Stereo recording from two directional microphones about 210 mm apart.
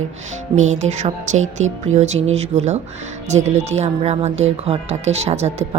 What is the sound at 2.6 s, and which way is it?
A woman's voice, 30° right (ahead or behind).